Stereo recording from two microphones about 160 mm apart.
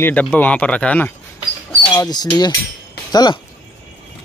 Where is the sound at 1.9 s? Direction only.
25° left (ahead or behind).